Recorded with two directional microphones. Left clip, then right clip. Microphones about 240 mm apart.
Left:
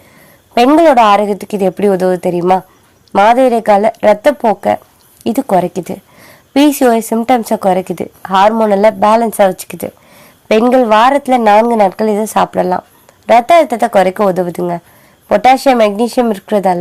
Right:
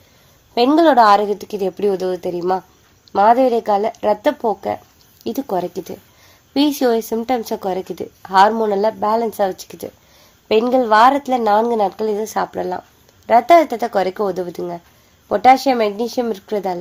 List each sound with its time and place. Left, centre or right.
0.5 s speech: left